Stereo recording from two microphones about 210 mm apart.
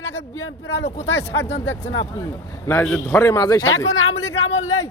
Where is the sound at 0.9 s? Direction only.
30° left (ahead or behind).